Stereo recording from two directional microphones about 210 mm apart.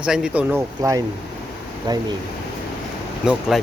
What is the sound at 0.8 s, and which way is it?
Speech, 15° right (ahead or behind).